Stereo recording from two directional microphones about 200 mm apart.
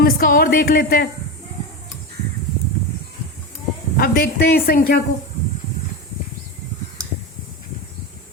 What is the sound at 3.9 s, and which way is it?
A woman's voice, 45° left (ahead or behind).